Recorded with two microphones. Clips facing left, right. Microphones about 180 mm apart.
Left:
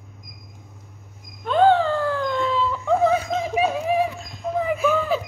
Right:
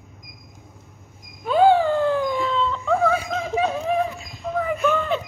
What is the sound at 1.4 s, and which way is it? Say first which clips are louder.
Dog: right 1 dB; 10° right (ahead or behind).